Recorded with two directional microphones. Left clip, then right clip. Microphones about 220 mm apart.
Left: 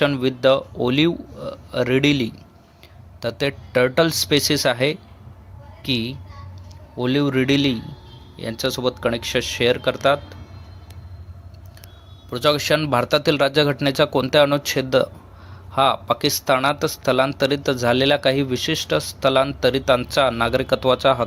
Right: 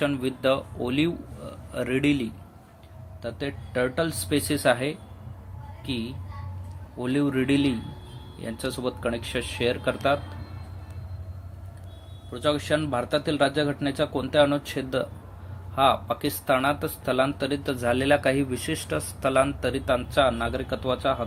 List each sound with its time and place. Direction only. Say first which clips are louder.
0.0 s speech: left 7 dB; 25° left (ahead or behind)
12.3 s speech: left 7 dB; 30° left (ahead or behind)